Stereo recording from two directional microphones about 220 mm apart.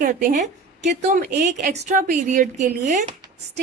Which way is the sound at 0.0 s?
40° right (ahead or behind).